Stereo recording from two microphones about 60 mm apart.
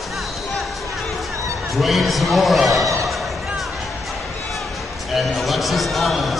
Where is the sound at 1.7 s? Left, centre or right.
Centre.